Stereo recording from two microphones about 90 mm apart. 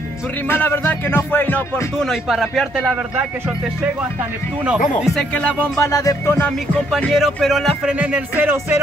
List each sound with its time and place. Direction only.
0.5 s music: 25° left (ahead or behind)
2.0 s speech: centre (ahead or behind)
5.3 s speech: 15° left (ahead or behind)
5.8 s speech: 40° left (ahead or behind)
7.2 s speech: centre (ahead or behind)
8.0 s speech: 15° right (ahead or behind)